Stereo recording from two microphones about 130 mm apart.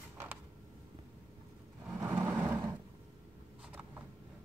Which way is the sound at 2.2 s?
15° right (ahead or behind).